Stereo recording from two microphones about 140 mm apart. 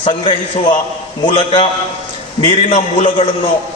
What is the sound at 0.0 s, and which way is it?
Speech, 35° left (ahead or behind).